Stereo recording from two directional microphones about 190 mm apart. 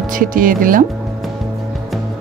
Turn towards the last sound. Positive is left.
turn(degrees=-45)  # may be behind; listen again after turning